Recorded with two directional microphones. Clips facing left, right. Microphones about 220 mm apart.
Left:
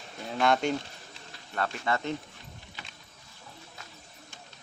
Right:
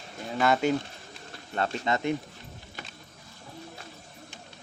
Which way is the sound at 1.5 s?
25° right (ahead or behind).